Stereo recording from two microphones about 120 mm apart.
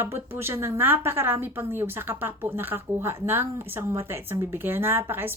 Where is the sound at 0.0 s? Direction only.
20° right (ahead or behind).